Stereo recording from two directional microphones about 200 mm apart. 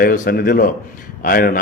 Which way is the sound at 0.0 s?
45° left (ahead or behind).